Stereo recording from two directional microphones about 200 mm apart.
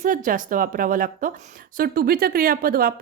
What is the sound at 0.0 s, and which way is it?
Speech, 40° right (ahead or behind).